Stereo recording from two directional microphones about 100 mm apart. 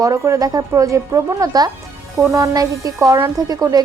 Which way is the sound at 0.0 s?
35° right (ahead or behind).